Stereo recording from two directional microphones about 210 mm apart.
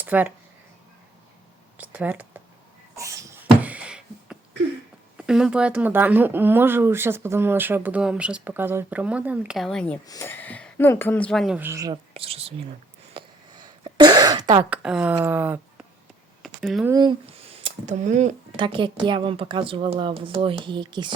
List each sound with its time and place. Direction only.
0.0 s speech: 10° right (ahead or behind)
1.8 s speech: 5° right (ahead or behind)
2.9 s a sound: 15° right (ahead or behind)
5.1 s speech: 5° right (ahead or behind); by 12.5 s 30° right (ahead or behind)
13.1 s throat clearing: 20° right (ahead or behind)
14.6 s speech: 5° right (ahead or behind)
16.4 s a sound: centre (ahead or behind)
16.9 s speech: 20° right (ahead or behind)
18.5 s a woman's voice: 20° right (ahead or behind)